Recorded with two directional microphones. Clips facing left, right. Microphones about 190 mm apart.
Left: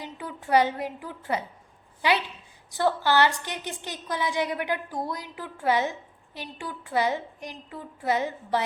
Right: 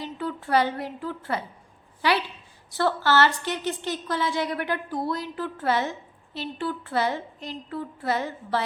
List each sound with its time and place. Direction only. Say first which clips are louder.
0.0 s a woman's voice: right 5 dB; 15° left (ahead or behind)